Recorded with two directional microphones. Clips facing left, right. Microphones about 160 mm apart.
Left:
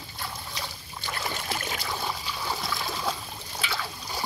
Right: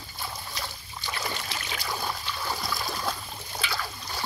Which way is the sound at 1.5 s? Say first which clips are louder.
Left 4 dB; 45° left (ahead or behind).